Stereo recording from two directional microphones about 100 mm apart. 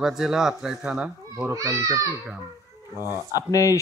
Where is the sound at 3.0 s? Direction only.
35° left (ahead or behind).